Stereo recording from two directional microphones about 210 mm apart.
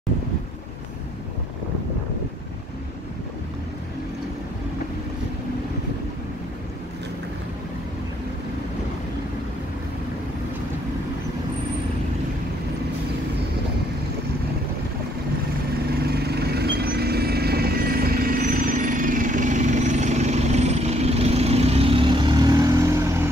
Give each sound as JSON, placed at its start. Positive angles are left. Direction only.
{"t": 16.0, "sound": "vehicle", "side_deg": -50}